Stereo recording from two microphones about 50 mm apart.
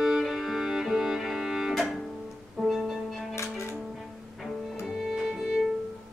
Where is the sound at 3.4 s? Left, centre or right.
Left.